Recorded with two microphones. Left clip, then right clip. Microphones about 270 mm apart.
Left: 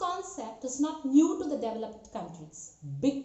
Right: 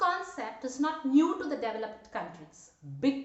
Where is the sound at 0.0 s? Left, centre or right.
Centre.